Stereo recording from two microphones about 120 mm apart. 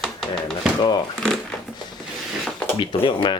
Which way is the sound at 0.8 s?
35° left (ahead or behind).